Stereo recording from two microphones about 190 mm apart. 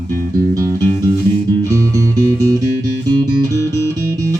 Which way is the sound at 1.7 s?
15° right (ahead or behind).